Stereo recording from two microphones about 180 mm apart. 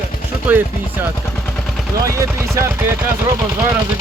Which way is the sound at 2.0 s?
15° right (ahead or behind).